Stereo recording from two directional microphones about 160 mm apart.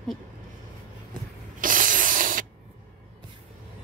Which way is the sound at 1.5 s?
55° right (ahead or behind).